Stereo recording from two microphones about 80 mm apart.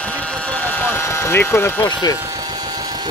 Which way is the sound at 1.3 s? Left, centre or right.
Left.